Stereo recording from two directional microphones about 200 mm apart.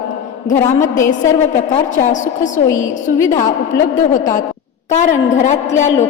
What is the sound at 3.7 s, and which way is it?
Speech, 15° left (ahead or behind).